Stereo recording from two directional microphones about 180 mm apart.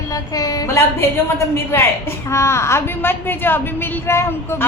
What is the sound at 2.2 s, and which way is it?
A woman's voice, 15° left (ahead or behind).